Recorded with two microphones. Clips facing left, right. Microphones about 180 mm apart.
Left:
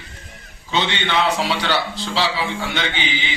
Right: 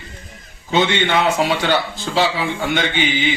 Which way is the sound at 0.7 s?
45° right (ahead or behind).